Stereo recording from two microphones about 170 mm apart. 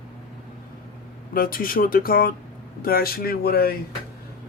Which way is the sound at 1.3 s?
60° left (ahead or behind).